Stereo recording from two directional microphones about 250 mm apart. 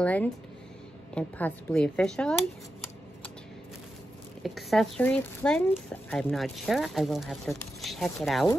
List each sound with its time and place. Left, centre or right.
0.0 s speech: centre
4.4 s speech: centre